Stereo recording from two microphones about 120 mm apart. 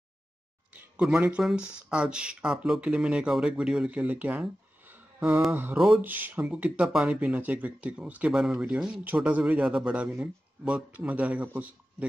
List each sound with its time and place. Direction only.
0.7 s speech: 10° right (ahead or behind)